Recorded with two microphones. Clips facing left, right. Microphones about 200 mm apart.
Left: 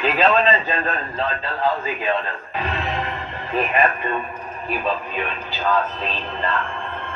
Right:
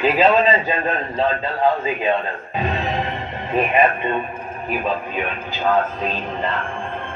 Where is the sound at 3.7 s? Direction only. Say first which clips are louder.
Right 4 dB; 25° right (ahead or behind).